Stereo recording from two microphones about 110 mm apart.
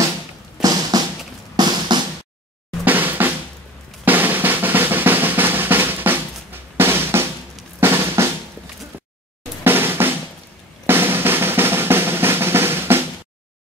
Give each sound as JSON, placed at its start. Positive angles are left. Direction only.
{"t": 0.6, "sound": "music", "side_deg": -35}
{"t": 1.6, "sound": "drum", "side_deg": -40}
{"t": 2.8, "sound": "drum", "side_deg": -15}
{"t": 9.7, "sound": "drum", "side_deg": -20}